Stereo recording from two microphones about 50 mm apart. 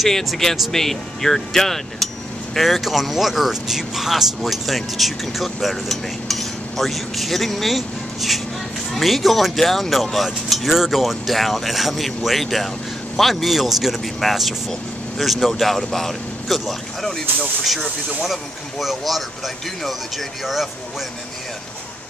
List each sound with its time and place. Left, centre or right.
0.0 s speech: centre